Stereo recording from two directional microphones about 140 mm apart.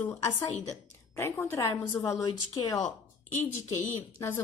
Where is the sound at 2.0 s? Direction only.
25° left (ahead or behind).